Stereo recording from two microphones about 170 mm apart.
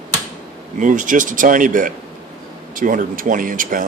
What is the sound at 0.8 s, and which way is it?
Speech, 50° right (ahead or behind).